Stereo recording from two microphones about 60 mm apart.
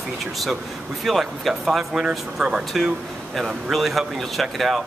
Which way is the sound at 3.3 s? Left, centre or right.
Centre.